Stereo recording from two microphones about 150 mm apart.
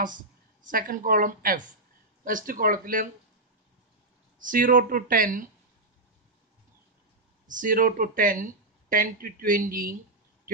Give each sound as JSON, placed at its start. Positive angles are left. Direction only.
{"t": 0.7, "sound": "speech", "side_deg": -65}
{"t": 4.4, "sound": "speech", "side_deg": -65}
{"t": 7.4, "sound": "speech", "side_deg": -60}